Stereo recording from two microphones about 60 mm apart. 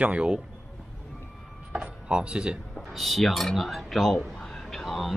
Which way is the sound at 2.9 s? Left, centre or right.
Centre.